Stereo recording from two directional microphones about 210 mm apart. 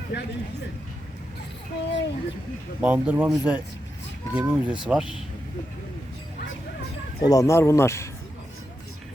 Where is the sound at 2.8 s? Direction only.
5° right (ahead or behind).